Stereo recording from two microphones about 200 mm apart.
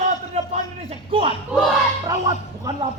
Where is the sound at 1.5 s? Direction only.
5° right (ahead or behind).